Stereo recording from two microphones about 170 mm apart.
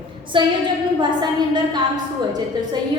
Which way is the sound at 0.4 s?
30° right (ahead or behind).